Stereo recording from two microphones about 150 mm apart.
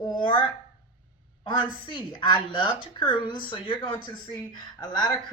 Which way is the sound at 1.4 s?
35° left (ahead or behind).